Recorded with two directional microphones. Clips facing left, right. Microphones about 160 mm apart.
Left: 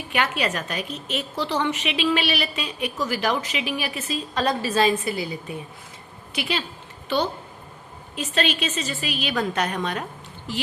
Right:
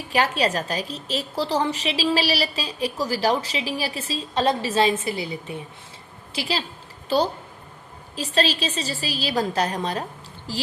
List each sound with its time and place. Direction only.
0.1 s a woman's voice: 35° right (ahead or behind)